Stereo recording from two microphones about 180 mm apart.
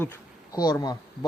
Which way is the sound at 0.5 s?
20° left (ahead or behind).